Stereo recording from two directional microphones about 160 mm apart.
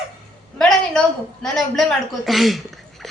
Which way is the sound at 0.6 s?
5° left (ahead or behind).